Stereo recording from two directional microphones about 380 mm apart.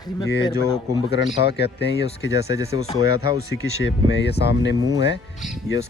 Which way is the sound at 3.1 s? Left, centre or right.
Left.